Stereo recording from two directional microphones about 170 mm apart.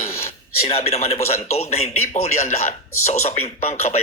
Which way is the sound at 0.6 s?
35° left (ahead or behind).